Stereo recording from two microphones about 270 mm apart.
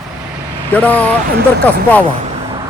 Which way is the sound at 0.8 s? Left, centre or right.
Centre.